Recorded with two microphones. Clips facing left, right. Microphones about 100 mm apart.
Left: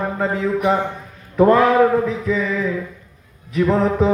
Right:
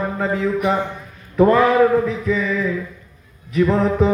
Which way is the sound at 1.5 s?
15° left (ahead or behind).